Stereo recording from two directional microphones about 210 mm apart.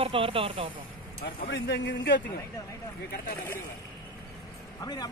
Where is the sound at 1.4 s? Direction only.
50° left (ahead or behind).